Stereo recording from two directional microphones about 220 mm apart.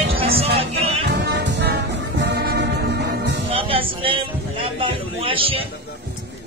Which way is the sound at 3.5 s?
25° right (ahead or behind).